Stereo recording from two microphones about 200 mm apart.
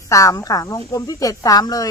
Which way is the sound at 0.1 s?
15° left (ahead or behind).